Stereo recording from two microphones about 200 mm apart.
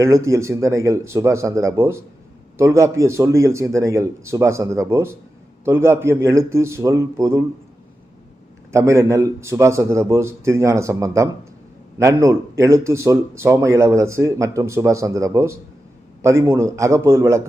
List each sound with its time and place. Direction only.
0.0 s a man's voice: 15° right (ahead or behind)
8.7 s a man's voice: 15° right (ahead or behind)